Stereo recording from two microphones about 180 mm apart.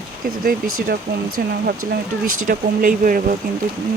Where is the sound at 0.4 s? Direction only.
55° right (ahead or behind).